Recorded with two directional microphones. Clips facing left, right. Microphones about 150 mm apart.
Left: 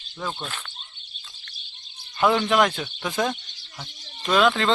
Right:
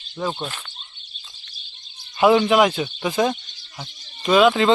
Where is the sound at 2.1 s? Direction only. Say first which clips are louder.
Right 5 dB; 10° right (ahead or behind).